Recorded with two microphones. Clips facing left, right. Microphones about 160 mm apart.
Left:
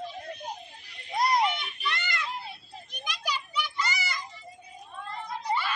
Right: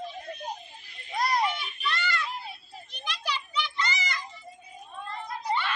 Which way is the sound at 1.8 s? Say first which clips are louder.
Right 3 dB; 15° left (ahead or behind).